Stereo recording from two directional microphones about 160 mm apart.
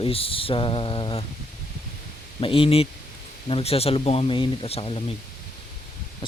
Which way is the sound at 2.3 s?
35° left (ahead or behind).